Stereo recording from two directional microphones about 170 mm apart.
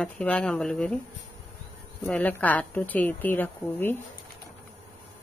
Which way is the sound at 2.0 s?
10° left (ahead or behind).